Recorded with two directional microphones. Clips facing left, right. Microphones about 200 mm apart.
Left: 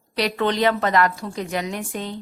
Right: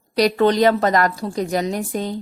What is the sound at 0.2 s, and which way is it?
A woman's voice, 40° right (ahead or behind).